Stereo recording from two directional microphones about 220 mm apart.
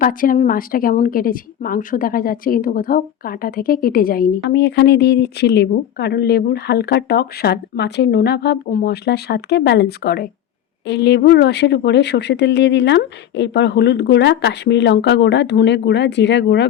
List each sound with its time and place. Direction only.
0.0 s a woman's voice: 40° left (ahead or behind)